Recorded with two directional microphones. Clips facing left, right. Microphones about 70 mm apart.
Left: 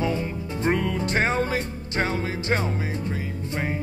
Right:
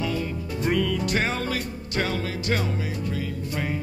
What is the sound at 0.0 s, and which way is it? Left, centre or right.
Music, left.